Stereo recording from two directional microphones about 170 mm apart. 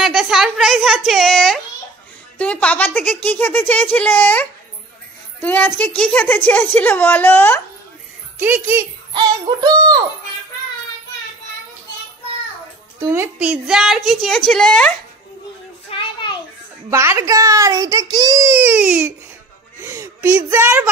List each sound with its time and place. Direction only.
0.0 s a woman's voice: centre (ahead or behind)
8.4 s speech: 10° right (ahead or behind)
9.1 s synthetic singing: 20° right (ahead or behind)
13.0 s speech: 15° right (ahead or behind)
13.5 s a woman's voice: 5° right (ahead or behind)
15.9 s a sound: 35° left (ahead or behind)
16.9 s a child's voice: 15° right (ahead or behind)